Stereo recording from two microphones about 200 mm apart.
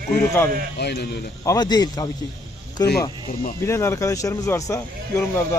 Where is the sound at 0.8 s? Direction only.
55° left (ahead or behind).